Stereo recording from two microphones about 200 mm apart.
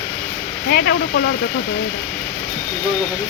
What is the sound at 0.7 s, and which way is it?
Speech, 50° left (ahead or behind).